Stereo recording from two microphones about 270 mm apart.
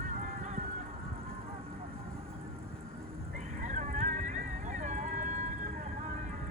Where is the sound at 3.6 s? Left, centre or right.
Right.